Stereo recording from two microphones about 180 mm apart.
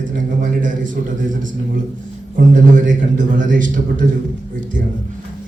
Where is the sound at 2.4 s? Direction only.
50° right (ahead or behind).